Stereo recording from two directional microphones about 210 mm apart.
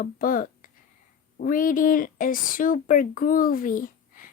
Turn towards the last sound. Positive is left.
turn(degrees=40)  # may be behind; listen again after turning